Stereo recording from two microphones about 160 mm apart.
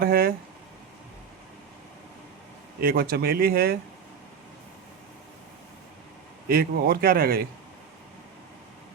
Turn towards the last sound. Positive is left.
turn(degrees=-70)  # may be behind; listen again after turning